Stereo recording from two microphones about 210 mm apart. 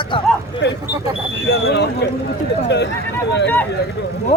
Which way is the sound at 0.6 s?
55° left (ahead or behind).